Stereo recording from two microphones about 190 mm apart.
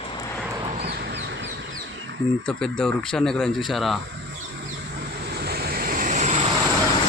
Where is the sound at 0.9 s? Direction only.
60° right (ahead or behind).